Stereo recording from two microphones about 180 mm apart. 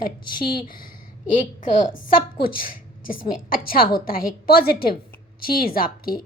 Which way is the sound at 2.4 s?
55° left (ahead or behind).